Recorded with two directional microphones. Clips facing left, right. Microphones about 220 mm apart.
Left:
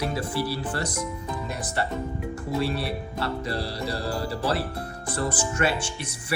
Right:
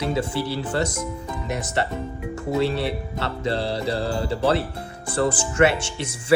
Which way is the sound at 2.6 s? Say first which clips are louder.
Right 5 dB; 25° right (ahead or behind).